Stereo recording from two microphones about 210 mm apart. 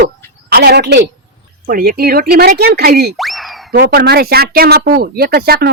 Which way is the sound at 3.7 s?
50° right (ahead or behind).